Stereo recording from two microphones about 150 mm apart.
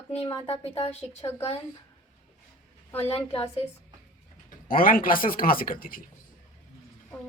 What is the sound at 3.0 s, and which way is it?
Speech, 40° left (ahead or behind).